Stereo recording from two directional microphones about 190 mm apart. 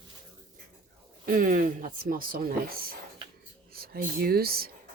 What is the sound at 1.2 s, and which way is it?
Speech, 45° right (ahead or behind).